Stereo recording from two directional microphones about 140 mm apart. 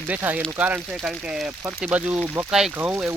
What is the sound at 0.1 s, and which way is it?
Speech, 15° right (ahead or behind).